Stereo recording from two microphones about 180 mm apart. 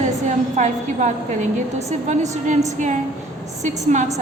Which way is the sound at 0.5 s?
40° right (ahead or behind).